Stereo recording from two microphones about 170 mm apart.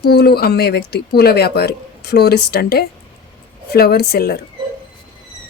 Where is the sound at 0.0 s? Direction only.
70° left (ahead or behind).